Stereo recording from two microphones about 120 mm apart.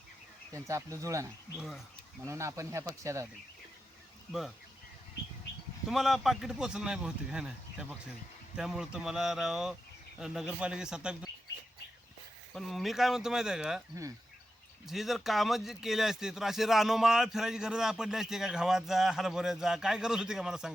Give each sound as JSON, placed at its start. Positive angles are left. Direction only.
{"t": 0.5, "sound": "speech", "side_deg": -25}
{"t": 1.5, "sound": "speech", "side_deg": 0}
{"t": 2.2, "sound": "speech", "side_deg": -25}
{"t": 4.3, "sound": "speech", "side_deg": 0}
{"t": 5.9, "sound": "a man's voice", "side_deg": 0}
{"t": 12.5, "sound": "speech", "side_deg": 0}
{"t": 14.8, "sound": "speech", "side_deg": 0}